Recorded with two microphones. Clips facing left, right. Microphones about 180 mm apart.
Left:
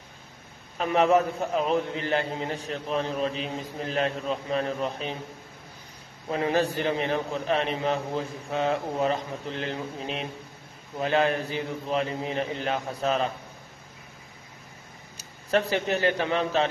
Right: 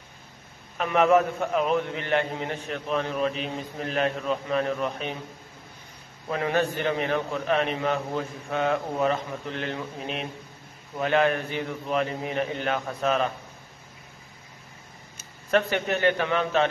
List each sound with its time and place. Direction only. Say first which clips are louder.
0.7 s a man's voice: right 1 dB; 35° left (ahead or behind)
6.3 s a man's voice: even; 30° left (ahead or behind)
15.1 s a man's voice: right 1 dB; 35° left (ahead or behind)